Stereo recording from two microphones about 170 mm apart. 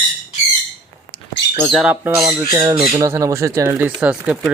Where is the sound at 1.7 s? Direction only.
5° right (ahead or behind).